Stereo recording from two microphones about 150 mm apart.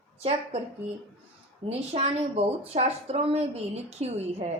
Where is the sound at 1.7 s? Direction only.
45° right (ahead or behind).